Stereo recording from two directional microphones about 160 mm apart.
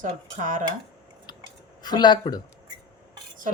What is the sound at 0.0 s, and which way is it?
Cutlery, 55° right (ahead or behind).